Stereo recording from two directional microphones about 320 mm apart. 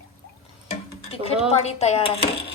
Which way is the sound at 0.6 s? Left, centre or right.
Centre.